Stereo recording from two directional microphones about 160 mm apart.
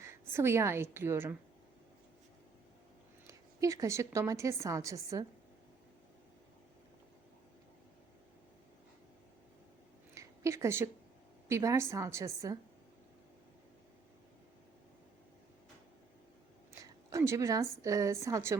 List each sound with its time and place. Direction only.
0.0 s a woman's voice: 15° right (ahead or behind)
3.2 s a woman's voice: 20° right (ahead or behind)
10.2 s a sound: 20° right (ahead or behind)
11.4 s a woman's voice: 20° right (ahead or behind)
16.8 s a woman's voice: 20° right (ahead or behind)